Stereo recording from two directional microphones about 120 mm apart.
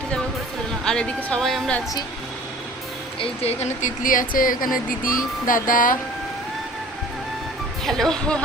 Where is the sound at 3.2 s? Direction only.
60° left (ahead or behind); by 4.1 s 80° left.